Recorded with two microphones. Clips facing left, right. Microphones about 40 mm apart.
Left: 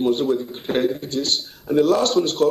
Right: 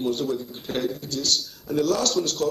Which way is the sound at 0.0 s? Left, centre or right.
Left.